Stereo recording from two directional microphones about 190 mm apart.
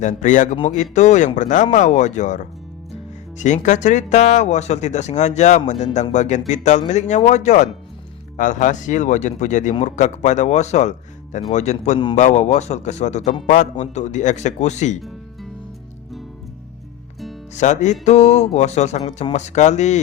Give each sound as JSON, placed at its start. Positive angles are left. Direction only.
{"t": 0.0, "sound": "a man's voice", "side_deg": 40}
{"t": 17.5, "sound": "a man's voice", "side_deg": 40}